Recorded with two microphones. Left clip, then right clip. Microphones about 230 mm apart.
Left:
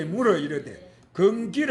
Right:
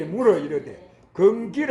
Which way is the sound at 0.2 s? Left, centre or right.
Left.